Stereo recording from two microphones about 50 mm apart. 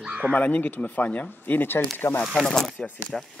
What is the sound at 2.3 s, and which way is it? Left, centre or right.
Speech, centre.